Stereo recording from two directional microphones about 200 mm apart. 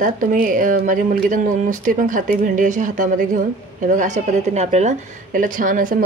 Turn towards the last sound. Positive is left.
turn(degrees=-40)  # may be behind; listen again after turning